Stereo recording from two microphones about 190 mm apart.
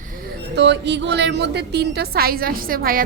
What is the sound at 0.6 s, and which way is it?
A woman's voice, 65° right (ahead or behind).